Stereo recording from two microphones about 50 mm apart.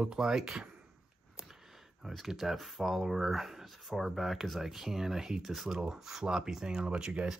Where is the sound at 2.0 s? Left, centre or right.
Centre.